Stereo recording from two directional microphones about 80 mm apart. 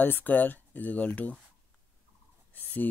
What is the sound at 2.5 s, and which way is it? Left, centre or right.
Speech, left.